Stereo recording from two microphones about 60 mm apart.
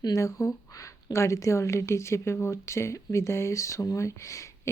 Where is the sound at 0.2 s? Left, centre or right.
Left.